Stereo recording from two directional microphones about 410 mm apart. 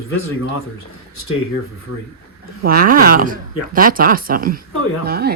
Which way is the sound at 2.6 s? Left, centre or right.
Right.